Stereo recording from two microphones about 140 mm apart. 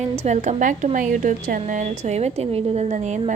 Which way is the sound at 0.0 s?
50° right (ahead or behind).